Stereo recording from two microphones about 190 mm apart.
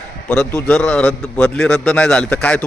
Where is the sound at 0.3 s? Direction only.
10° left (ahead or behind).